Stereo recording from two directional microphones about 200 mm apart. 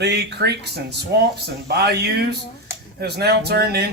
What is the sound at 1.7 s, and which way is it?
A man's voice, 55° right (ahead or behind).